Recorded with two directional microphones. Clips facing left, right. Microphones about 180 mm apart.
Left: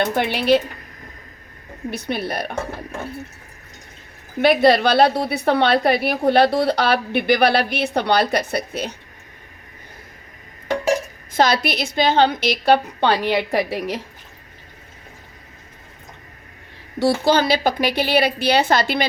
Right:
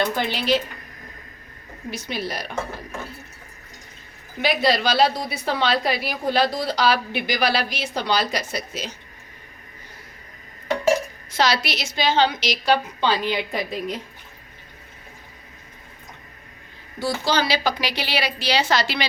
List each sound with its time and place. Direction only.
0.0 s a woman's voice: 60° left (ahead or behind)
1.9 s a woman's voice: 60° left (ahead or behind)
4.4 s a woman's voice: 55° left (ahead or behind)
11.3 s a woman's voice: 50° left (ahead or behind); by 14.0 s 75° left (ahead or behind)
17.0 s a woman's voice: 60° left (ahead or behind)